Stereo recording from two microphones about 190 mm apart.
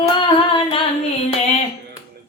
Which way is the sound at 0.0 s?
25° left (ahead or behind).